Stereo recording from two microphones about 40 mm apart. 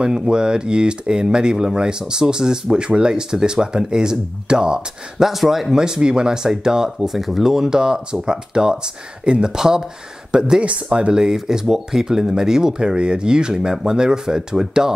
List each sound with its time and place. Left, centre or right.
0.0 s speech: right
5.3 s speech: centre